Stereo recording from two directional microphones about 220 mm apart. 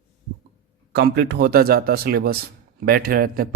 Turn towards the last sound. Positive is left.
turn(degrees=-40)  # may be behind; listen again after turning